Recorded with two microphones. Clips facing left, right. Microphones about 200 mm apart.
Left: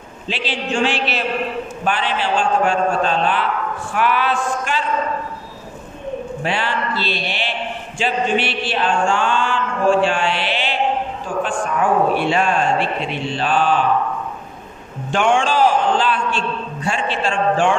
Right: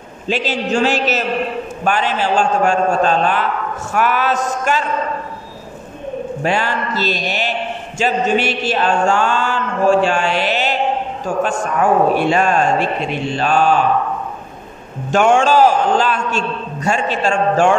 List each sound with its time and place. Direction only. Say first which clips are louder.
0.3 s a man's voice: right 5 dB; 45° right (ahead or behind)
6.4 s a man's voice: right 4 dB; 45° right (ahead or behind)
8.0 s chant: right 3 dB; 40° right (ahead or behind)
11.2 s a man's voice: right 4 dB; 40° right (ahead or behind)
15.0 s a sound: right 4 dB; 45° right (ahead or behind)